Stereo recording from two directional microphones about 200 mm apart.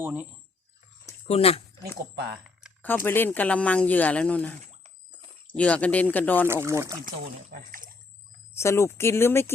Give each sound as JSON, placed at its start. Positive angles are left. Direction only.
{"t": 0.0, "sound": "speech", "side_deg": -10}
{"t": 1.3, "sound": "speech", "side_deg": 30}
{"t": 2.8, "sound": "speech", "side_deg": 10}
{"t": 5.5, "sound": "speech", "side_deg": 5}
{"t": 6.5, "sound": "speech", "side_deg": -15}
{"t": 8.5, "sound": "speech", "side_deg": 15}